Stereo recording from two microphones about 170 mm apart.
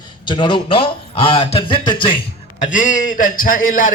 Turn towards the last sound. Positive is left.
turn(degrees=50)  # may be behind; listen again after turning